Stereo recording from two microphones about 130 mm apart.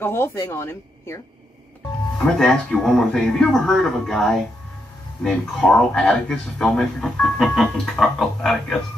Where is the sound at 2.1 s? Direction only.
5° left (ahead or behind).